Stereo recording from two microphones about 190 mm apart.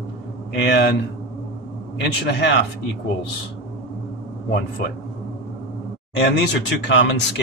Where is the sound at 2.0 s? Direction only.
60° left (ahead or behind).